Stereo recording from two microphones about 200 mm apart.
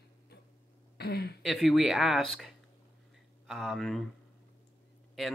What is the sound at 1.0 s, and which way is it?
Speech, 55° left (ahead or behind).